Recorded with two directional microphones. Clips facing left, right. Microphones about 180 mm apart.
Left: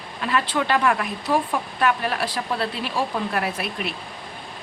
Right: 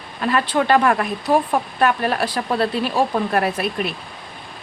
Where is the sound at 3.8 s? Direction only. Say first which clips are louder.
Right 5 dB; 50° right (ahead or behind).